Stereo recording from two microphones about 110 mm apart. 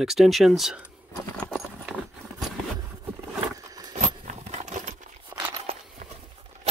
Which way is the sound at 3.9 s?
90° right.